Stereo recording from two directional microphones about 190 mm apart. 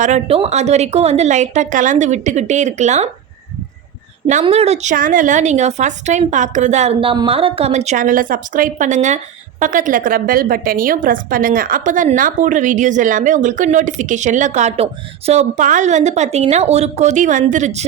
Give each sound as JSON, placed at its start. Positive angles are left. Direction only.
{"t": 0.0, "sound": "a woman's voice", "side_deg": -35}
{"t": 4.3, "sound": "a woman's voice", "side_deg": -35}